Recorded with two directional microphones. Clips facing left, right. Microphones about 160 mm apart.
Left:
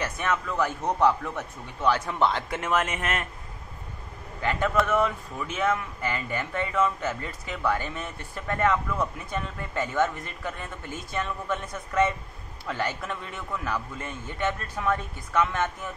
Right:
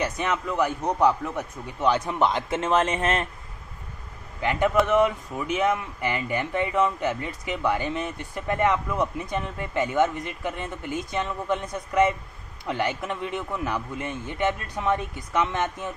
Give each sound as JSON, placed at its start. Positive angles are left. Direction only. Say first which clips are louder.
{"t": 0.0, "sound": "a man's voice", "louder": "right 2 dB", "side_deg": -15}
{"t": 4.4, "sound": "a man's voice", "louder": "right 3 dB", "side_deg": -15}